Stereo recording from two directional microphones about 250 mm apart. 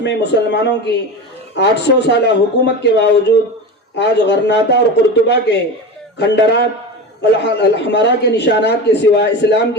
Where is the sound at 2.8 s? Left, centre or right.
Left.